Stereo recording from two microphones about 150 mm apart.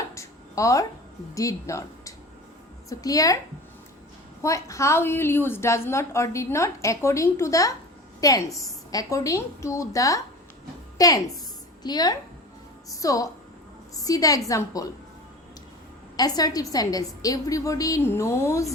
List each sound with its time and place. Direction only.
0.1 s a sound: 20° left (ahead or behind)
1.4 s a woman's voice: 20° left (ahead or behind)
4.4 s a woman's voice: 20° left (ahead or behind)
16.1 s a woman's voice: 25° left (ahead or behind)